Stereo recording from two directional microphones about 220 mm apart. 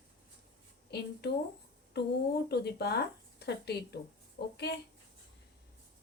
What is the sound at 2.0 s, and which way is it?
A woman's voice, 50° left (ahead or behind).